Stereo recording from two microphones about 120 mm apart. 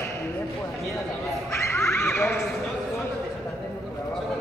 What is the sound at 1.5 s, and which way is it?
Neigh, 20° left (ahead or behind).